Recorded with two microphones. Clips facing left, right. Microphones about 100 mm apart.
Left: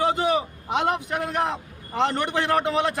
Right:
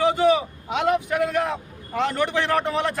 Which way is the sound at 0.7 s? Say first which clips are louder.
Right 2 dB; 20° left (ahead or behind).